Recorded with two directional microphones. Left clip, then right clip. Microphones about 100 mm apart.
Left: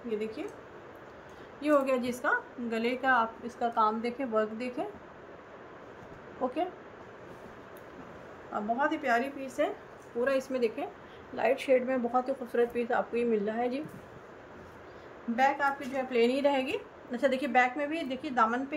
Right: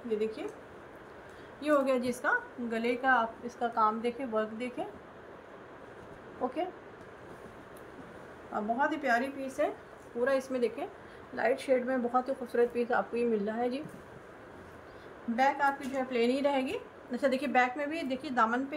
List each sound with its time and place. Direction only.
0.2 s speech: 20° left (ahead or behind)
1.6 s a woman's voice: 20° left (ahead or behind); by 4.8 s 35° left (ahead or behind)
8.5 s speech: 20° left (ahead or behind)
15.3 s a woman's voice: 25° left (ahead or behind); by 18.8 s 5° left (ahead or behind)